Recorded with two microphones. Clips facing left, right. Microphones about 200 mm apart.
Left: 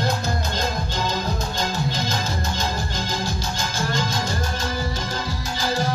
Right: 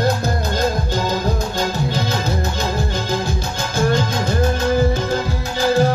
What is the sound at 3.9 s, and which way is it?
Music, 55° right (ahead or behind).